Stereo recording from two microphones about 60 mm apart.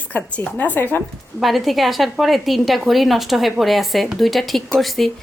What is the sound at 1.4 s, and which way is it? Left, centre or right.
A woman's voice, centre.